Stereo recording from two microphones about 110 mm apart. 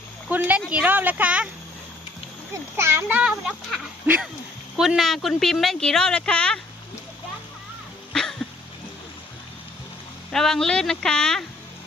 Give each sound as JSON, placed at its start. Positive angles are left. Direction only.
{"t": 0.3, "sound": "speech", "side_deg": -15}
{"t": 2.7, "sound": "a child's voice", "side_deg": -25}
{"t": 3.1, "sound": "speech", "side_deg": -10}
{"t": 4.8, "sound": "speech", "side_deg": 0}
{"t": 8.1, "sound": "cough", "side_deg": 5}
{"t": 10.3, "sound": "speech", "side_deg": 5}